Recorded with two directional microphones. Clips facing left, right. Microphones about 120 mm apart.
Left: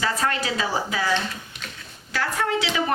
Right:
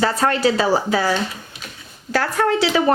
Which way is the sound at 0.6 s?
35° right (ahead or behind).